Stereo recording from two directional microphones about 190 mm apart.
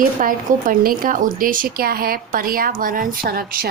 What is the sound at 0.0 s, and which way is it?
Speech, 45° right (ahead or behind).